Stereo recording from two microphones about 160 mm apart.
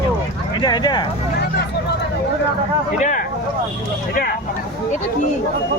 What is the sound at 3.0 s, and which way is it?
Speech, 55° left (ahead or behind).